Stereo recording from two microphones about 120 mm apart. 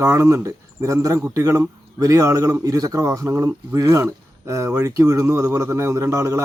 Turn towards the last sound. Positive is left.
turn(degrees=-25)  # may be behind; listen again after turning